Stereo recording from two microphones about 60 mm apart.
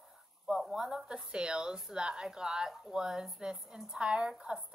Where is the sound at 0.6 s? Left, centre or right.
Centre.